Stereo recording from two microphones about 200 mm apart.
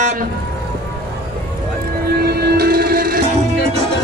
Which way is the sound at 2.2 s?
50° right (ahead or behind).